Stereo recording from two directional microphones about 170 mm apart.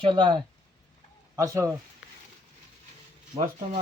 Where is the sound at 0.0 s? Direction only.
25° right (ahead or behind).